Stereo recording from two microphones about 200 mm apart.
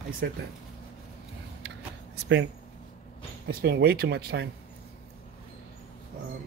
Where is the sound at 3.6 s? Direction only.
50° right (ahead or behind).